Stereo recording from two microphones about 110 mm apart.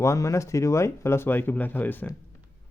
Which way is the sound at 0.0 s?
30° left (ahead or behind).